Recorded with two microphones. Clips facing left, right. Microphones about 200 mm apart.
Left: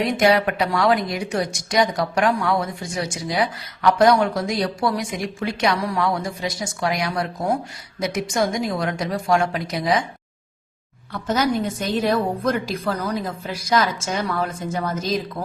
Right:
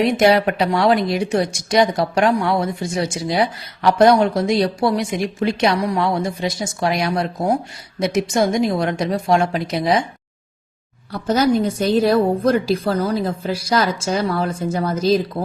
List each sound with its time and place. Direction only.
0.2 s a woman's voice: 30° right (ahead or behind)
11.1 s a woman's voice: 35° right (ahead or behind)